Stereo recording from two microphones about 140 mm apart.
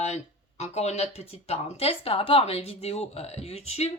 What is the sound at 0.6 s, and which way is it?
Speech, 50° left (ahead or behind).